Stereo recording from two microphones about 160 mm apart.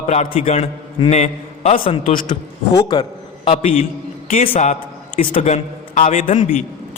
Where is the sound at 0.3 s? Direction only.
40° left (ahead or behind).